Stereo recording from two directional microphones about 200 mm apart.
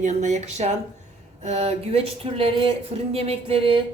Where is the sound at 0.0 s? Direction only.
35° right (ahead or behind).